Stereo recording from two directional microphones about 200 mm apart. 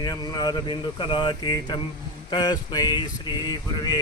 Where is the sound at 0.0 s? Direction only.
20° left (ahead or behind).